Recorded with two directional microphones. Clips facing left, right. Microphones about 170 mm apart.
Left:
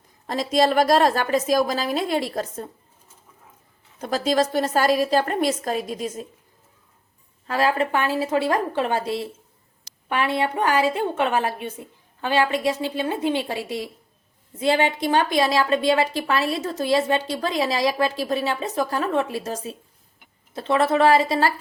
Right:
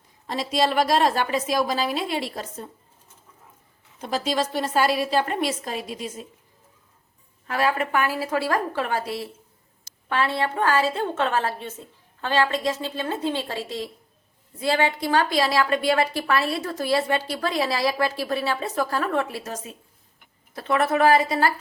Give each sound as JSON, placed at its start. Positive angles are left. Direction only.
{"t": 0.3, "sound": "a woman's voice", "side_deg": 45}
{"t": 4.0, "sound": "a woman's voice", "side_deg": 45}
{"t": 7.4, "sound": "a woman's voice", "side_deg": 30}